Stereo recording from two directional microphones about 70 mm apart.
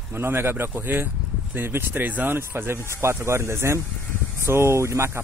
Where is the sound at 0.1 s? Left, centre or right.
Right.